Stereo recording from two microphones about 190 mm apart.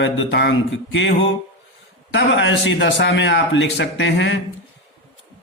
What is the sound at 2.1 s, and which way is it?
Speech, 75° left (ahead or behind).